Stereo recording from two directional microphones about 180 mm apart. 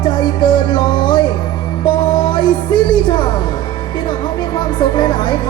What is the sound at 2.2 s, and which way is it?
Music, 25° left (ahead or behind).